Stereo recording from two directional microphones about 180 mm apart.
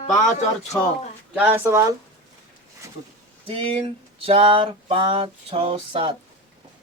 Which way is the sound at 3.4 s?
30° right (ahead or behind).